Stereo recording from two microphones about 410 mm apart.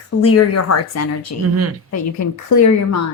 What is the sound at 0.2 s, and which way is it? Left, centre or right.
A woman's voice, left.